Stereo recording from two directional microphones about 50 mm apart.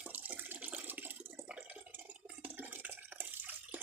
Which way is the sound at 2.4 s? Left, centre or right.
Right.